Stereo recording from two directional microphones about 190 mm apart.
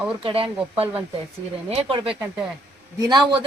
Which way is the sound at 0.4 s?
10° right (ahead or behind).